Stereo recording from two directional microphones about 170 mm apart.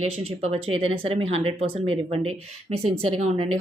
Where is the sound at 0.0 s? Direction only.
40° right (ahead or behind).